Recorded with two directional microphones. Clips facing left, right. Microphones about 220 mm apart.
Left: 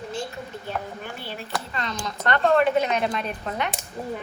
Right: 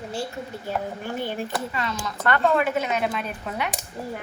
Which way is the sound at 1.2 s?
50° right (ahead or behind).